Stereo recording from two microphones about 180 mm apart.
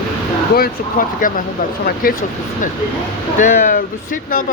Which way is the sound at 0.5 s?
55° left (ahead or behind).